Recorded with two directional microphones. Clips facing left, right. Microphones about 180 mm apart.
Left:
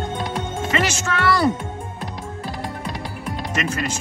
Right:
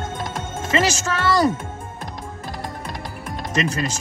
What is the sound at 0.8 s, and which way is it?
Music, 40° right (ahead or behind).